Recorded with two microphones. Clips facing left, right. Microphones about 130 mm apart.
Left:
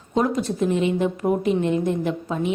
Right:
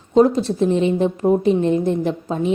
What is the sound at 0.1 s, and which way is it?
A woman's voice, 30° right (ahead or behind).